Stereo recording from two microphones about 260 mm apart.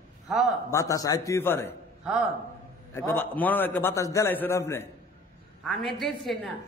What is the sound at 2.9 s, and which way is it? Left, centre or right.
A man's voice, centre.